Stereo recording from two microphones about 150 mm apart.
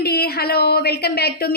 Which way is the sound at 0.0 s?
90° left.